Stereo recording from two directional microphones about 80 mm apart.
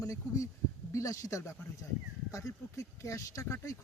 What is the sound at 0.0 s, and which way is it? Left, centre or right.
Speech, left.